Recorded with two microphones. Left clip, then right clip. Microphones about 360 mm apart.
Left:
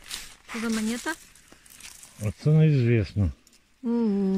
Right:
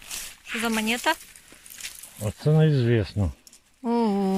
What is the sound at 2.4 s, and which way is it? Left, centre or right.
Speech, right.